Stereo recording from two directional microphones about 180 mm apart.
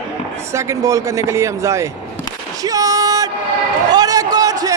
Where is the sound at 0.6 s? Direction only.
15° right (ahead or behind).